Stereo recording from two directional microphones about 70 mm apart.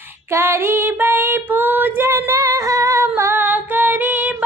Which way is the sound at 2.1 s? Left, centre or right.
Right.